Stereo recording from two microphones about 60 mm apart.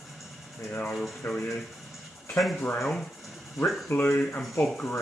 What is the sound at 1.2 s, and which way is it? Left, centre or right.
Speech, left.